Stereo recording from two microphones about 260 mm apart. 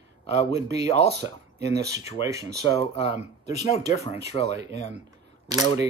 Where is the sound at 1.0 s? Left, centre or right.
Right.